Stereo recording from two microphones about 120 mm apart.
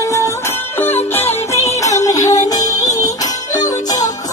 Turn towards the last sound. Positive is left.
turn(degrees=30)  # may be behind; listen again after turning